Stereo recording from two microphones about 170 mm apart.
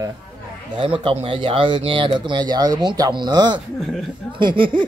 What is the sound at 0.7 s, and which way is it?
Speech, 30° right (ahead or behind).